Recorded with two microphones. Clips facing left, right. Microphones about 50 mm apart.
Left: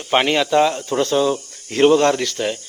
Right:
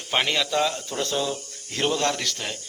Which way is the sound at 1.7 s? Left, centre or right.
Left.